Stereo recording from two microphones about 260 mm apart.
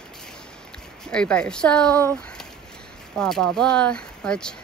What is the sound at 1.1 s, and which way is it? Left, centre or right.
Speech, centre.